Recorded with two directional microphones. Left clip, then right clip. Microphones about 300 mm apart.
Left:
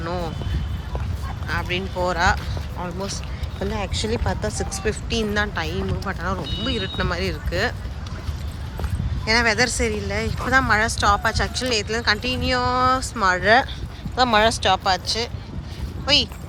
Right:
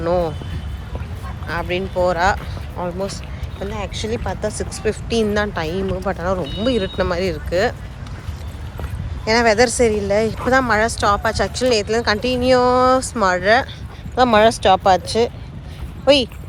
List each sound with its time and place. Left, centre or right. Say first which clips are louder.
0.0 s vehicle: right 9 dB; centre
1.5 s speech: right 3 dB; centre
9.2 s speech: right 4 dB; centre
16.0 s speech: right 5 dB; left